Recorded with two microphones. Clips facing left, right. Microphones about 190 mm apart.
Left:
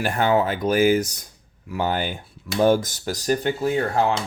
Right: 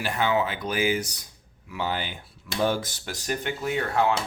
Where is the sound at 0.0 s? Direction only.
45° left (ahead or behind).